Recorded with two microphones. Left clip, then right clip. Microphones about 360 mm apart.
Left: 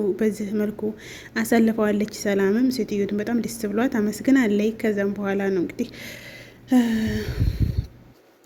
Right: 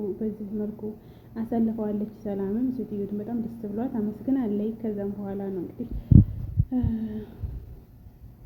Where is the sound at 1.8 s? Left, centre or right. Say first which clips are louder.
Left 8 dB; left.